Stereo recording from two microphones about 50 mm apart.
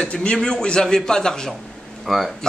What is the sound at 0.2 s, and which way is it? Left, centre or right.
A man's voice, centre.